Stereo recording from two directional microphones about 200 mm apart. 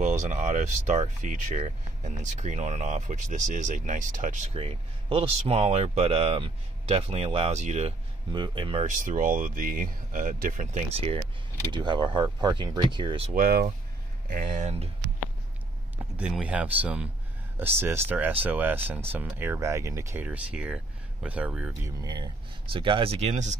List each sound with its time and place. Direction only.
0.0 s speech: 35° right (ahead or behind)
8.3 s speech: 25° right (ahead or behind)
8.8 s speech: 40° right (ahead or behind); by 13.3 s 25° right (ahead or behind)
13.3 s speech: 45° right (ahead or behind)
16.2 s speech: 5° right (ahead or behind)
21.8 s speech: 20° right (ahead or behind); by 23.6 s 35° right (ahead or behind)